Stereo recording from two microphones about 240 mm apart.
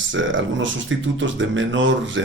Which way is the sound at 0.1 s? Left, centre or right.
Right.